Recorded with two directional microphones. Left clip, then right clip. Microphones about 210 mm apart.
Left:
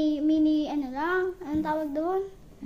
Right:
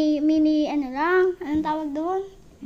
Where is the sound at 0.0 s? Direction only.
30° right (ahead or behind).